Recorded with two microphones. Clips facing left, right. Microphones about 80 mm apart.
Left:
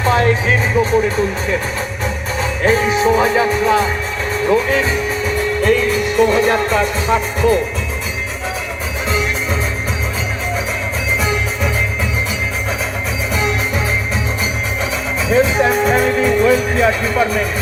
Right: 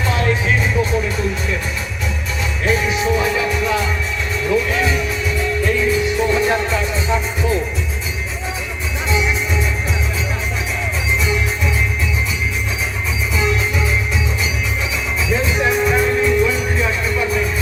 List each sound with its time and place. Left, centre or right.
0.0 s music: left
13.3 s music: left
15.4 s music: left